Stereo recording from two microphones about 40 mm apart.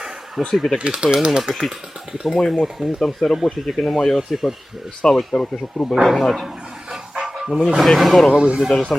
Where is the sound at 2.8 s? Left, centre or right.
Centre.